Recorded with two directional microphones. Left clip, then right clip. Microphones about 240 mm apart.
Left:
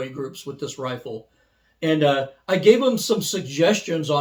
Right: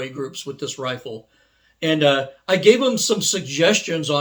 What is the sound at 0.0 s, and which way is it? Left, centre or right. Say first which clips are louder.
Speech: right 2 dB; centre.